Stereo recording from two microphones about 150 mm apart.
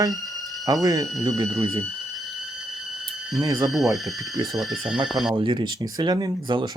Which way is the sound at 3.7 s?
Centre (ahead or behind).